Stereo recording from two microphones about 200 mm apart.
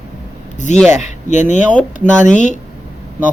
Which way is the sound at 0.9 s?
35° left (ahead or behind).